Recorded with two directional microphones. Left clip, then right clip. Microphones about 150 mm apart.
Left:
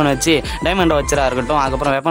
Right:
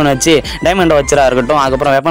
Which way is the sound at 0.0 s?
35° right (ahead or behind).